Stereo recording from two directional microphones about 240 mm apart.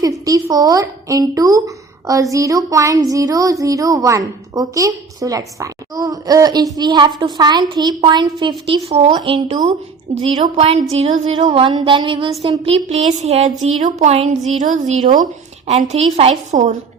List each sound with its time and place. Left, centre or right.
0.0 s a woman's voice: centre; by 16.7 s right